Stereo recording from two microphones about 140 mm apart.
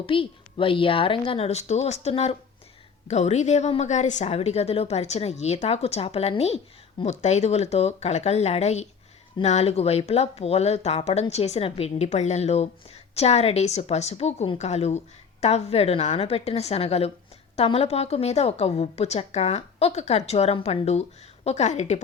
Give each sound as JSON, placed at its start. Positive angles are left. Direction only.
{"t": 0.0, "sound": "a woman's voice", "side_deg": 40}